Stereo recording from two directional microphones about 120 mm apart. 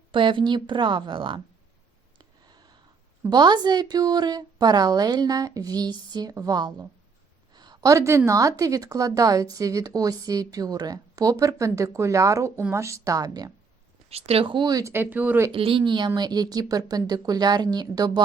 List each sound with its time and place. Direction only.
0.1 s a woman's voice: 45° right (ahead or behind)
2.1 s a sound: 35° right (ahead or behind)
3.2 s a woman's voice: 35° right (ahead or behind)
14.1 s a woman's voice: 55° right (ahead or behind); by 14.9 s 30° right (ahead or behind)
14.9 s speech: 15° right (ahead or behind)
15.5 s a woman's voice: 50° right (ahead or behind)